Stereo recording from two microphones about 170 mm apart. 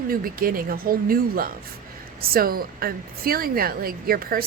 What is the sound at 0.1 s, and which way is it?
Speech, 60° right (ahead or behind).